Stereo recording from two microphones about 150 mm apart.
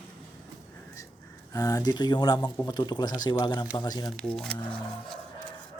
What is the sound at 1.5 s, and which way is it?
Speech, 25° left (ahead or behind).